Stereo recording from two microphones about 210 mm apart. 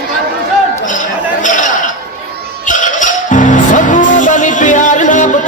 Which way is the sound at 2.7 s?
35° left (ahead or behind).